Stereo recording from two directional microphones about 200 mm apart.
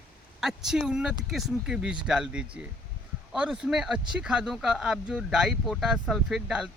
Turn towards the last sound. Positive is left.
turn(degrees=0)  # may be behind; listen again after turning